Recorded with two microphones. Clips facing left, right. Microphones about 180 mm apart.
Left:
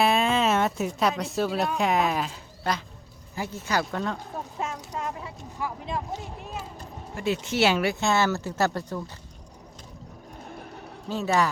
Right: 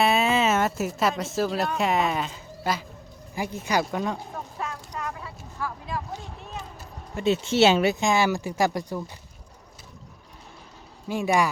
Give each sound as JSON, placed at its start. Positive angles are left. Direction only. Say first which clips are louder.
{"t": 0.0, "sound": "speech", "louder": "right 1 dB", "side_deg": -5}
{"t": 3.3, "sound": "speech", "louder": "right 2 dB", "side_deg": -15}
{"t": 4.6, "sound": "a sound", "louder": "left 1 dB", "side_deg": 25}
{"t": 7.4, "sound": "speech", "louder": "right 4 dB", "side_deg": -25}
{"t": 11.1, "sound": "speech", "louder": "right 1 dB", "side_deg": -10}